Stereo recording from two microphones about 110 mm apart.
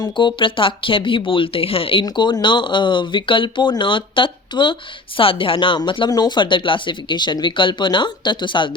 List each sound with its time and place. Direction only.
0.0 s speech: 45° left (ahead or behind)
2.0 s speech: 40° left (ahead or behind)